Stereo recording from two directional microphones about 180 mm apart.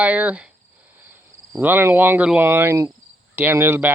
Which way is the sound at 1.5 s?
10° right (ahead or behind).